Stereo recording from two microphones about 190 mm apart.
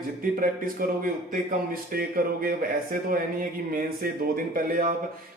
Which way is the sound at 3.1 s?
50° right (ahead or behind).